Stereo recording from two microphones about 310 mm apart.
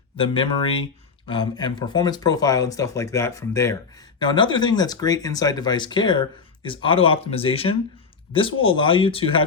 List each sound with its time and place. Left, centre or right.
0.2 s speech: centre